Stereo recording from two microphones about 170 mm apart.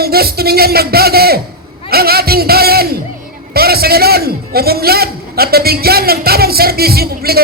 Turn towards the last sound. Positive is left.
turn(degrees=-65)  # may be behind; listen again after turning